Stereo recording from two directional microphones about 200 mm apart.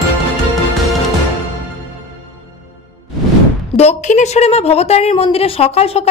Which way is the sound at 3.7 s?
35° left (ahead or behind).